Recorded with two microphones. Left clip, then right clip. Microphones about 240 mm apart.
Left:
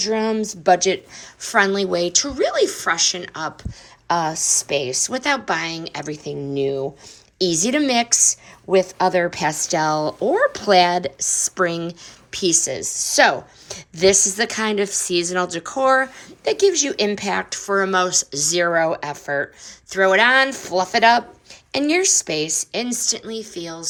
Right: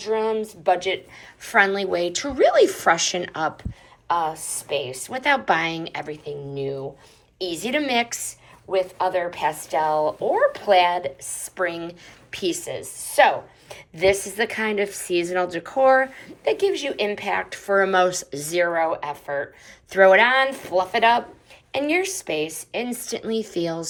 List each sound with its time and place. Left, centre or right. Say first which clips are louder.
0.6 s speech: left 6 dB; left; by 3.7 s centre
4.1 s a woman's voice: left 4 dB; left
5.2 s speech: right 4 dB; centre
6.1 s a woman's voice: left 4 dB; left
19.9 s speech: even; centre